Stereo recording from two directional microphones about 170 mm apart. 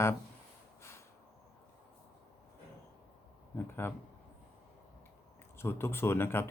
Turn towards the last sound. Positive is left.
turn(degrees=15)  # may be behind; listen again after turning